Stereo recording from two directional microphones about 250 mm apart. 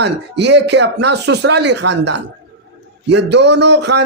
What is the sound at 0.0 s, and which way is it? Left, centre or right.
A man's voice, right.